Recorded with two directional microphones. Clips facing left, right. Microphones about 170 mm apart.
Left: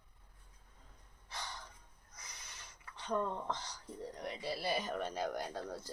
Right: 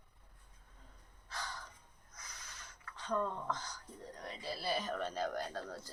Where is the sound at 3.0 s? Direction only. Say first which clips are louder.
Left 1 dB; 20° left (ahead or behind).